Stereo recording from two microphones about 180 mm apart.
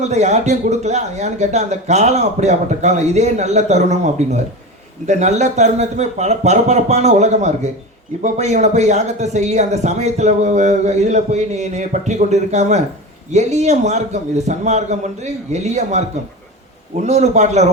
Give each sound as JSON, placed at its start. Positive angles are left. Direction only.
{"t": 0.0, "sound": "speech", "side_deg": -40}